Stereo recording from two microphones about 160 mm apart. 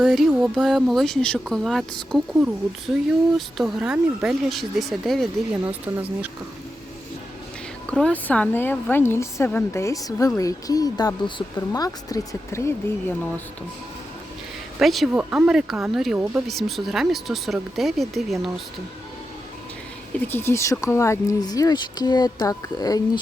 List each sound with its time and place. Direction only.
0.0 s speech: centre (ahead or behind)
3.3 s speech: 5° right (ahead or behind)
5.6 s speech: 10° right (ahead or behind)
7.9 s a woman's voice: 5° left (ahead or behind)
14.8 s speech: centre (ahead or behind)
20.1 s speech: 15° left (ahead or behind)